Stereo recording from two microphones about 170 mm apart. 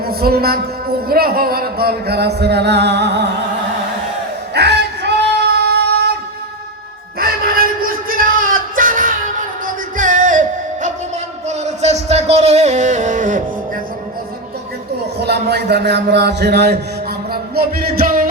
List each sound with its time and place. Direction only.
0.0 s music: 65° right (ahead or behind); by 3.2 s 80° right
4.5 s a sound: 75° right (ahead or behind)
7.2 s a sound: 60° right (ahead or behind)
9.6 s music: 50° right (ahead or behind)
11.4 s music: 40° right (ahead or behind)
15.2 s music: 75° right (ahead or behind); by 18.3 s 55° right (ahead or behind)